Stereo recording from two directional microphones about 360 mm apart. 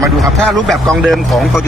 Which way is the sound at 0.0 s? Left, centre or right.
Centre.